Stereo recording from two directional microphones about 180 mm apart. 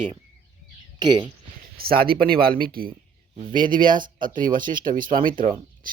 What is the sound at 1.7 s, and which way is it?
Speech, 55° right (ahead or behind).